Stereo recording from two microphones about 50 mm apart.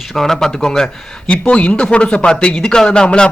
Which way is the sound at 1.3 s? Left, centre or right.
Left.